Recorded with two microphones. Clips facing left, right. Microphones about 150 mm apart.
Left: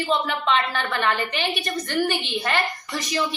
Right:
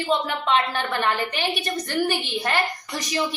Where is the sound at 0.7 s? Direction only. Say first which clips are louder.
Even; 15° right (ahead or behind).